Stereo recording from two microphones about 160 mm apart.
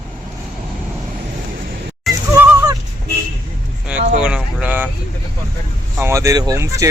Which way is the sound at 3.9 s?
5° right (ahead or behind).